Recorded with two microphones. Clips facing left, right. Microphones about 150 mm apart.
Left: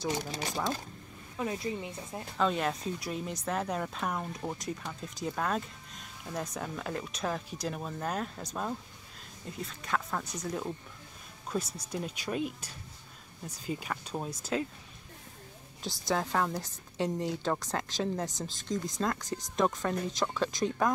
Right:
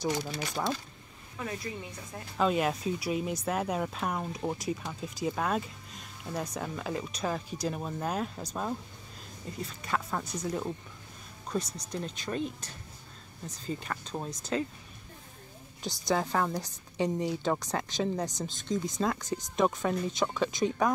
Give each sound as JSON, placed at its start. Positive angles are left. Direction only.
{"t": 1.4, "sound": "speech", "side_deg": 25}
{"t": 2.3, "sound": "a woman's voice", "side_deg": -5}
{"t": 15.8, "sound": "a woman's voice", "side_deg": 0}